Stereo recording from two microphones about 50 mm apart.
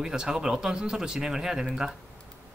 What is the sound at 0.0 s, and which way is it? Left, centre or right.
Speech, centre.